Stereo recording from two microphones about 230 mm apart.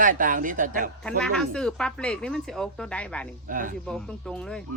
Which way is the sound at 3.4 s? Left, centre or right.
Right.